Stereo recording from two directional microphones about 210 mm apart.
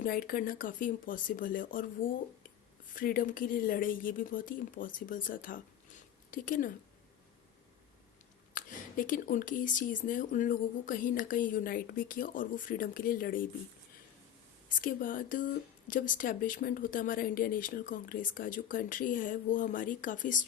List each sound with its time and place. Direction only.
0.0 s speech: 40° left (ahead or behind)
8.5 s speech: 40° left (ahead or behind)
14.8 s speech: 40° left (ahead or behind)